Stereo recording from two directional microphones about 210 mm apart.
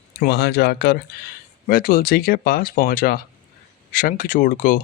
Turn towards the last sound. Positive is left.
turn(degrees=40)  # may be behind; listen again after turning